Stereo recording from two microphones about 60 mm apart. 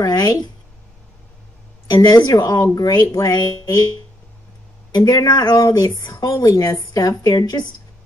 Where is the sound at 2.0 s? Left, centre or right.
Left.